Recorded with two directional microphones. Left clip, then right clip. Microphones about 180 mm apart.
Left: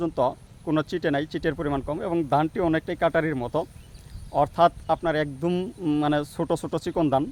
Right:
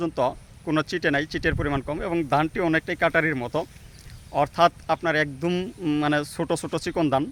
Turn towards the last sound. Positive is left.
turn(degrees=5)  # may be behind; listen again after turning